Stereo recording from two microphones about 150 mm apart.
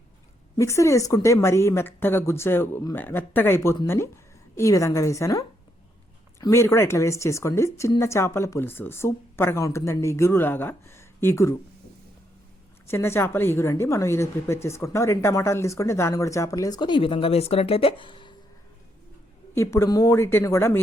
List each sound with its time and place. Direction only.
0.5 s a woman's voice: 20° left (ahead or behind)
12.9 s a woman's voice: 15° left (ahead or behind); by 18.3 s 35° left (ahead or behind)
19.5 s a woman's voice: 20° left (ahead or behind)